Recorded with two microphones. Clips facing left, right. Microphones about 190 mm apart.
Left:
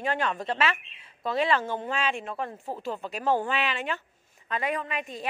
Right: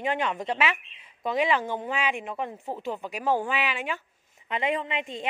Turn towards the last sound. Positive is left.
turn(degrees=-25)  # may be behind; listen again after turning